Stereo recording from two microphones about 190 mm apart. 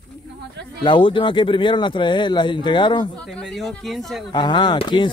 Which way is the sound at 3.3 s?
5° left (ahead or behind).